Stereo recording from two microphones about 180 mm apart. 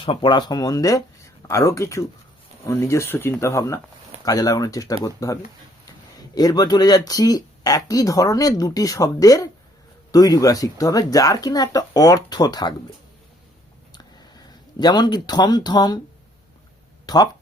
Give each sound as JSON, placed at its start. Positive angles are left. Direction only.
{"t": 0.0, "sound": "speech", "side_deg": 30}
{"t": 13.9, "sound": "a sound", "side_deg": 25}
{"t": 17.1, "sound": "speech", "side_deg": 20}